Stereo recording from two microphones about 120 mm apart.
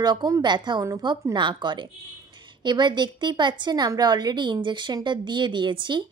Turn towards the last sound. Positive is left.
turn(degrees=-40)  # may be behind; listen again after turning